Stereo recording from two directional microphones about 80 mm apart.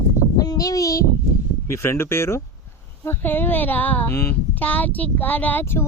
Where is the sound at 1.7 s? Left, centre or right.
Left.